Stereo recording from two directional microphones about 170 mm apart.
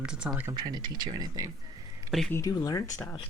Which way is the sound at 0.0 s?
5° right (ahead or behind).